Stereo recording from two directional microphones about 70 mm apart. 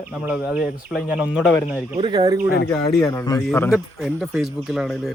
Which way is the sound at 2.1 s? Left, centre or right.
Right.